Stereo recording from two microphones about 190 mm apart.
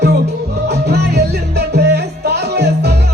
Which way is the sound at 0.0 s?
60° right (ahead or behind).